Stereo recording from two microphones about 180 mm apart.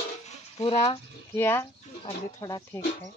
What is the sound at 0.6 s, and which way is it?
Speech, 20° left (ahead or behind).